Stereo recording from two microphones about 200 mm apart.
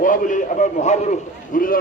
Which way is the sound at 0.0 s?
40° left (ahead or behind).